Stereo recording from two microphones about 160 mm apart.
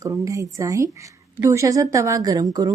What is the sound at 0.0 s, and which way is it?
A woman's voice, 20° right (ahead or behind).